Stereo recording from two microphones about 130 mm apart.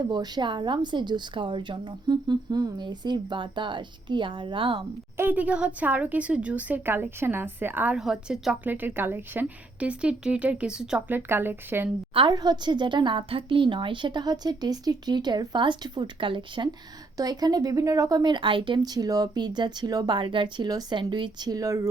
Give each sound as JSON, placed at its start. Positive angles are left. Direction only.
{"t": 0.1, "sound": "a woman's voice", "side_deg": -30}
{"t": 5.1, "sound": "a woman's voice", "side_deg": -15}
{"t": 7.9, "sound": "a woman's voice", "side_deg": -5}
{"t": 12.1, "sound": "a woman's voice", "side_deg": -35}